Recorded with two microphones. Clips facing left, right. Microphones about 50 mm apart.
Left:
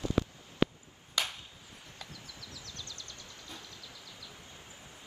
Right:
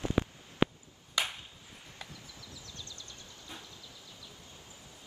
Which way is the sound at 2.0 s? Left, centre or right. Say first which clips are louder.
Left 1 dB; right.